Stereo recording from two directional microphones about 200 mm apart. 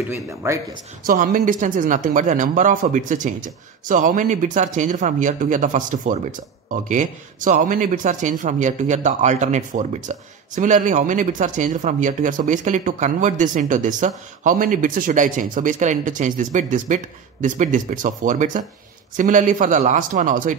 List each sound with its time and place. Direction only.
0.1 s speech: 15° right (ahead or behind)
1.0 s speech: 45° right (ahead or behind)